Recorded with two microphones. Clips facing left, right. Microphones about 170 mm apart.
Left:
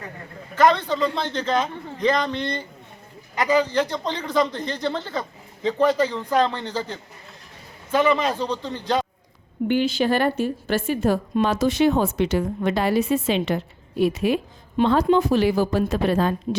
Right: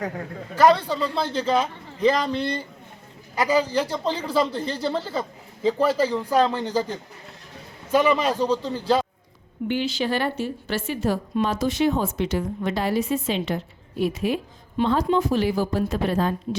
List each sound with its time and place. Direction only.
0.5 s a man's voice: 10° right (ahead or behind)
9.6 s a woman's voice: 50° left (ahead or behind); by 16.6 s 75° left (ahead or behind)